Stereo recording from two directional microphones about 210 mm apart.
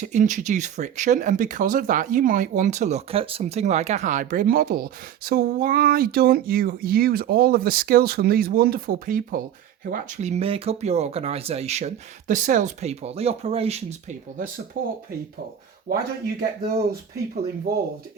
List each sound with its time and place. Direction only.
0.0 s speech: 35° right (ahead or behind)
14.8 s speech: 55° right (ahead or behind)
15.9 s speech: 45° right (ahead or behind)